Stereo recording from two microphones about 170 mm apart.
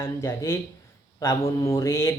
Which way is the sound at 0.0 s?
15° left (ahead or behind).